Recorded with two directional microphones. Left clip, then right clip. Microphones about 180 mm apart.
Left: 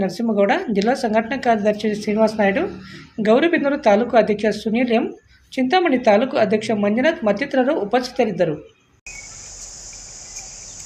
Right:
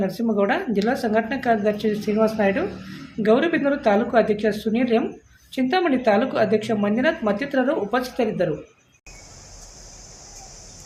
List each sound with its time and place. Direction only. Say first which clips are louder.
0.0 s speech: left 3 dB; 15° left (ahead or behind)